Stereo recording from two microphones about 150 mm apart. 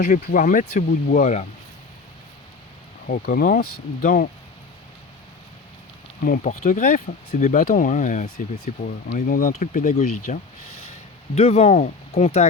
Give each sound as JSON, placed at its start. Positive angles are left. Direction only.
{"t": 0.0, "sound": "speech", "side_deg": 60}
{"t": 3.1, "sound": "speech", "side_deg": 75}
{"t": 6.2, "sound": "speech", "side_deg": 65}
{"t": 8.5, "sound": "speech", "side_deg": 90}
{"t": 9.1, "sound": "speech", "side_deg": 65}